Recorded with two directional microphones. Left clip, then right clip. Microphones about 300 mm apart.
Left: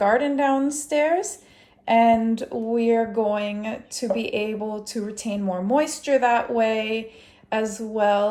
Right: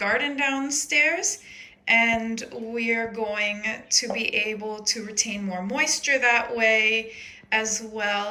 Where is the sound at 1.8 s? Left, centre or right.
Centre.